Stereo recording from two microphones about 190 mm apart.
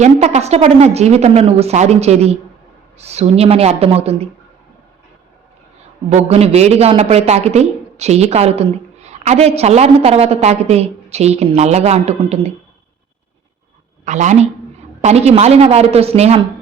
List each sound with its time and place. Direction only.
0.0 s a woman's voice: 35° right (ahead or behind)
6.1 s a woman's voice: 35° right (ahead or behind)
14.0 s a woman's voice: 40° right (ahead or behind)